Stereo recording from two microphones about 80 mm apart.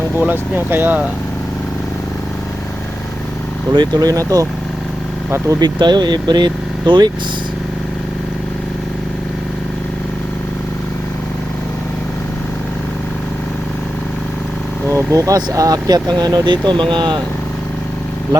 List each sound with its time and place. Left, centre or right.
0.2 s speech: right
3.8 s speech: right
5.5 s speech: right
14.8 s speech: right